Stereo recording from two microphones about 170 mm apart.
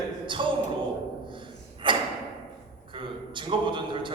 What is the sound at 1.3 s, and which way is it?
Gasp, 30° right (ahead or behind).